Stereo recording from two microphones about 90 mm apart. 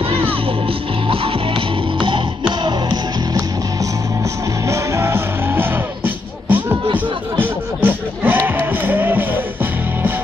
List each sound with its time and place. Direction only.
1.0 s music: 90° right
2.0 s music: 65° right (ahead or behind)
4.6 s music: 30° right (ahead or behind)